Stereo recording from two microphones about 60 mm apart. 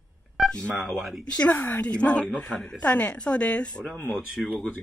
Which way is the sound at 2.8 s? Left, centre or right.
Left.